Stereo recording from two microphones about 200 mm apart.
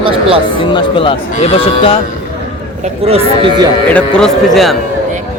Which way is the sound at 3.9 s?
5° left (ahead or behind).